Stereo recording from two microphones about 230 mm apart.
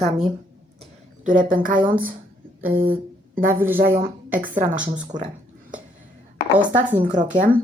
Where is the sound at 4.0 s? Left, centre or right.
Right.